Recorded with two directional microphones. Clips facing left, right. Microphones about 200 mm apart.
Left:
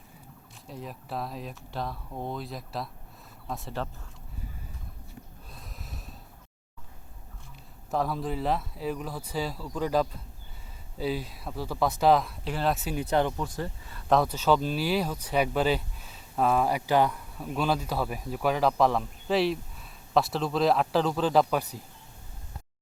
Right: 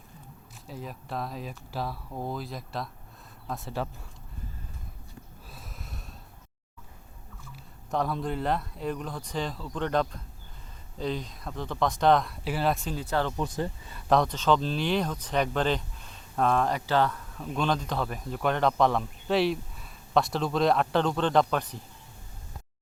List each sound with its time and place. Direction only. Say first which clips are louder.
0.7 s speech: even; centre (ahead or behind)
5.5 s snort: right 2 dB; centre (ahead or behind)
7.9 s speech: even; centre (ahead or behind)
13.0 s speech: left 3 dB; 15° left (ahead or behind)
13.3 s speech: right 3 dB; 20° right (ahead or behind)
14.1 s speech: even; 5° left (ahead or behind)